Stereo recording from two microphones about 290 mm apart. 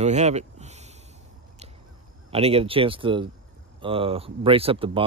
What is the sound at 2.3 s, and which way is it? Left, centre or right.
Speech, centre.